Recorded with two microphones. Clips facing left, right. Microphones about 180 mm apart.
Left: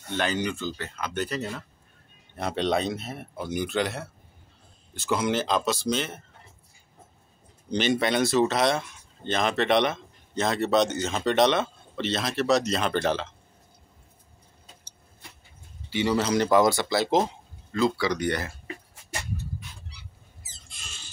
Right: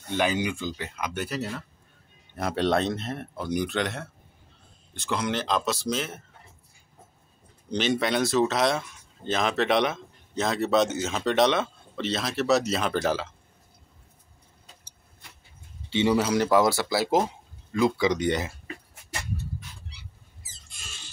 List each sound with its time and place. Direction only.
0.1 s speech: 10° right (ahead or behind)
7.7 s speech: centre (ahead or behind)
15.9 s speech: 25° right (ahead or behind)
16.2 s speech: 5° right (ahead or behind)
17.7 s speech: 20° right (ahead or behind)